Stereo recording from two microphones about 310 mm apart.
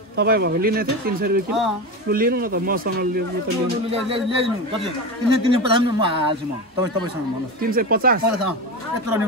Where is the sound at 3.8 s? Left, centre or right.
Centre.